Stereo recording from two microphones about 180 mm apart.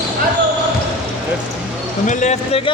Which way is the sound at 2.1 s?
40° left (ahead or behind).